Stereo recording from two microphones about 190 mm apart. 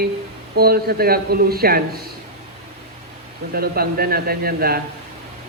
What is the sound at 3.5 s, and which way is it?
Speech, 55° right (ahead or behind).